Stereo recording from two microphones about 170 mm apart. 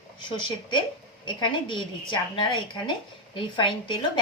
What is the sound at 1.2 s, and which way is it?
A woman's voice, 25° left (ahead or behind).